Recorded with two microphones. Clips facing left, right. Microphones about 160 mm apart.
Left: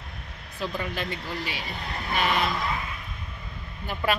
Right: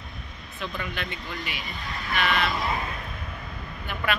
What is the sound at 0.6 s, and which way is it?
Speech, 35° left (ahead or behind).